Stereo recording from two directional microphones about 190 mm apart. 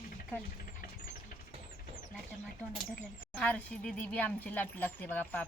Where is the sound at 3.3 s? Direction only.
5° left (ahead or behind).